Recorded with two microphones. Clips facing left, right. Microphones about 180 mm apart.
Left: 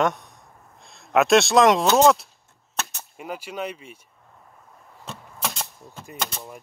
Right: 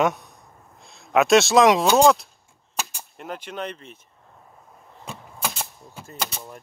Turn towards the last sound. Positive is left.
turn(degrees=0)  # may be behind; listen again after turning